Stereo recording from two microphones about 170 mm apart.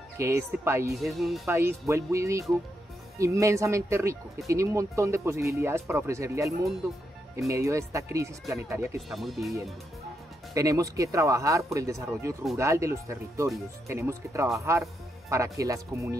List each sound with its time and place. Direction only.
0.2 s speech: 15° right (ahead or behind)
1.0 s speech: centre (ahead or behind)
1.5 s speech: 15° right (ahead or behind)
9.1 s speech: centre (ahead or behind)
10.5 s speech: 20° right (ahead or behind)